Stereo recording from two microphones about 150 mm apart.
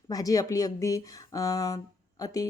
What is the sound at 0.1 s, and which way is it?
Speech, 25° left (ahead or behind).